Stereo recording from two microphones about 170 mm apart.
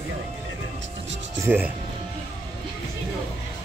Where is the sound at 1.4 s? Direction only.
10° right (ahead or behind).